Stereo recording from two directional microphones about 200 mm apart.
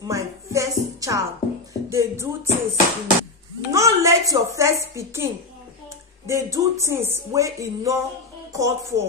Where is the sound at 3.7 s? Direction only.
15° right (ahead or behind).